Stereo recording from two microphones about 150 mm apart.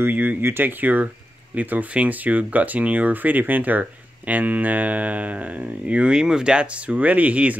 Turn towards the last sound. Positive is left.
turn(degrees=-10)  # may be behind; listen again after turning